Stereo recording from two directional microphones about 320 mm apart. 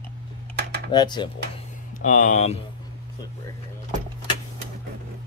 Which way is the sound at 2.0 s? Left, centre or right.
Left.